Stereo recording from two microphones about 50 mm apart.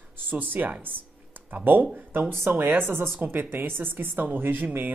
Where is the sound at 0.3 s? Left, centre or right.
Right.